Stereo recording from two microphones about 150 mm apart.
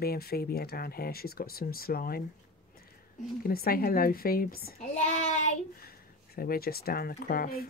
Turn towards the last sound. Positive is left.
turn(degrees=80)